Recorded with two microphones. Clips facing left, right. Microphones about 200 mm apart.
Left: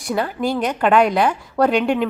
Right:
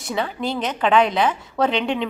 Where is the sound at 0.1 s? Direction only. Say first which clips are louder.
Left 4 dB; 5° left (ahead or behind).